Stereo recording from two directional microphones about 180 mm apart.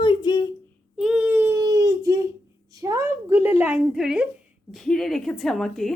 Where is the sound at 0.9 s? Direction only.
5° right (ahead or behind).